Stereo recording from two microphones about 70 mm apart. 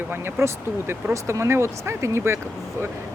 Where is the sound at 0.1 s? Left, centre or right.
Right.